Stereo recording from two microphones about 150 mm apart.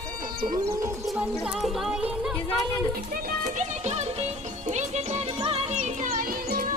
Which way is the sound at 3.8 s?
45° right (ahead or behind).